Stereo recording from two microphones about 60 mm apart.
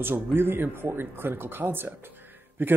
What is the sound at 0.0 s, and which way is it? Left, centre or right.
Speech, right.